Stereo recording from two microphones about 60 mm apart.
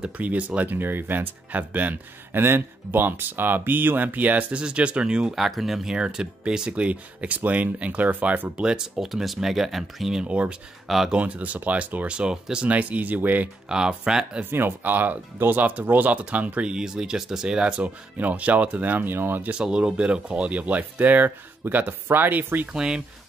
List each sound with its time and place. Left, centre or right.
0.0 s speech: right
5.3 s speech: centre
5.9 s speech: centre
10.2 s speech: right
13.7 s speech: centre
14.4 s speech: right
16.7 s speech: centre
17.8 s speech: right
19.5 s speech: centre; by 22.7 s right
22.7 s speech: centre